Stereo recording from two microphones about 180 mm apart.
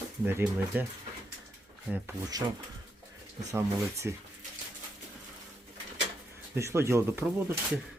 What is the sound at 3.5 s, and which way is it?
Speech, 15° right (ahead or behind).